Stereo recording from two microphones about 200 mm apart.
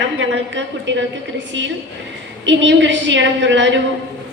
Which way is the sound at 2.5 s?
65° right (ahead or behind).